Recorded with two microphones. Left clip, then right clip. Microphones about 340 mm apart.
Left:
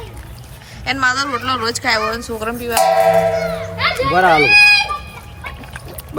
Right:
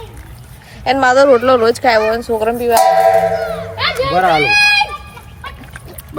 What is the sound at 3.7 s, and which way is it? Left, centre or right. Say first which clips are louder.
Children playing: right 1 dB; centre.